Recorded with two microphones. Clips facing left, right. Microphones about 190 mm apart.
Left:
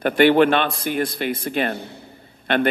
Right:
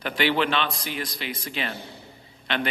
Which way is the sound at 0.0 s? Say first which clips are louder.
Left 10 dB; 50° left (ahead or behind).